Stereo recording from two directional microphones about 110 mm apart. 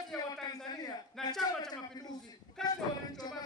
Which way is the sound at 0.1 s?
5° left (ahead or behind).